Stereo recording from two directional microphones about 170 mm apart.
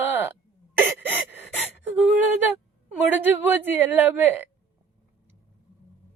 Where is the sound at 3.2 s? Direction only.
10° right (ahead or behind).